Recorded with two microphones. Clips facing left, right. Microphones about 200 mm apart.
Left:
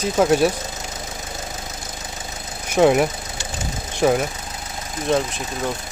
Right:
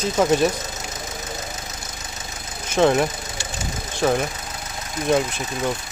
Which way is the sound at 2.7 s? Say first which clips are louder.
Left 2 dB; 10° left (ahead or behind).